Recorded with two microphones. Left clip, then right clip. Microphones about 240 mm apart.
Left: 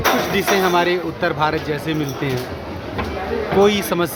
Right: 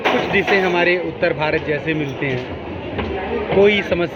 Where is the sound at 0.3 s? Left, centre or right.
Left.